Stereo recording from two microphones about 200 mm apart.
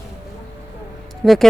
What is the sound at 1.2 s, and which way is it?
Speech, centre (ahead or behind).